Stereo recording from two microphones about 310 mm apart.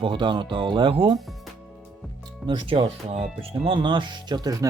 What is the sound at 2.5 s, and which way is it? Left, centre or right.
Speech, centre.